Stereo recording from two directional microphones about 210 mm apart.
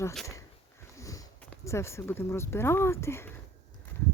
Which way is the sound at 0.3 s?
15° left (ahead or behind).